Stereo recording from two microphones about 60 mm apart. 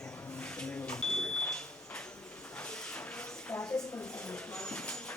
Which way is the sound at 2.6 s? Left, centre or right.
Centre.